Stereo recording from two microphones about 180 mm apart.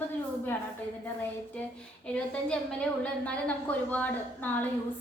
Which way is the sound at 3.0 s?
5° left (ahead or behind).